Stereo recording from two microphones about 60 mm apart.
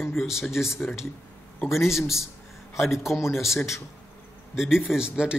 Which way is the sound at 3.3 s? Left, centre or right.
Centre.